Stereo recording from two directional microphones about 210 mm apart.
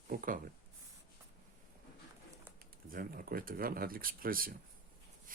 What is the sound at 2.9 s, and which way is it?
Speech, 45° right (ahead or behind).